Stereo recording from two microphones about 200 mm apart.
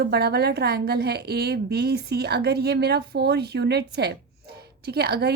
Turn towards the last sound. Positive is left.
turn(degrees=-55)  # may be behind; listen again after turning